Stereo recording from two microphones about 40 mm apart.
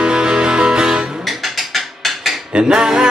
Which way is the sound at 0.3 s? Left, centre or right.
Centre.